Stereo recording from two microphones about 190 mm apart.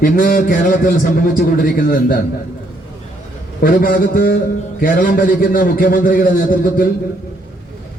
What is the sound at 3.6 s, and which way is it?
A man's voice, 50° left (ahead or behind).